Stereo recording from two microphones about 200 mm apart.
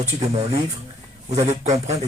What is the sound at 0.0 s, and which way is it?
Speech, 30° right (ahead or behind).